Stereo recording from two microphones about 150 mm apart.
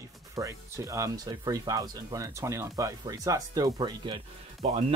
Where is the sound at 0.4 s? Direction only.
20° right (ahead or behind).